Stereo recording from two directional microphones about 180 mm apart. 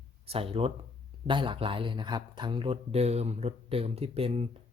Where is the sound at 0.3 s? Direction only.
30° right (ahead or behind).